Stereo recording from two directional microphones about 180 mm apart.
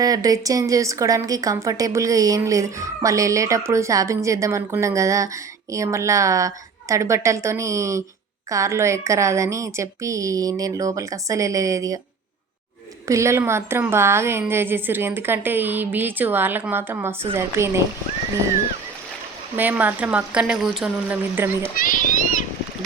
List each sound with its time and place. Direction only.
0.0 s a woman's voice: 20° right (ahead or behind)
13.1 s a woman's voice: 15° right (ahead or behind)
19.5 s a woman's voice: 10° right (ahead or behind)
21.8 s a child's voice: 45° left (ahead or behind)